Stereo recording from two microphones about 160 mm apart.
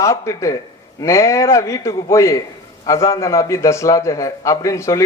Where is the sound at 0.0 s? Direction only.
20° left (ahead or behind).